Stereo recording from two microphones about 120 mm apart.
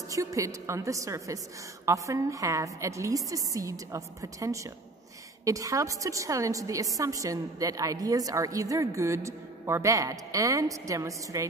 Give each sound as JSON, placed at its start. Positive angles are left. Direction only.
{"t": 0.1, "sound": "a woman's voice", "side_deg": -30}